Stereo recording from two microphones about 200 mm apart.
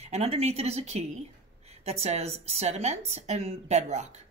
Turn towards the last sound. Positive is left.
turn(degrees=-35)  # may be behind; listen again after turning